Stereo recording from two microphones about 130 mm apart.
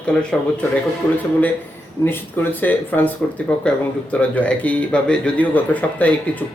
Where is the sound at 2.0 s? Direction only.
25° left (ahead or behind).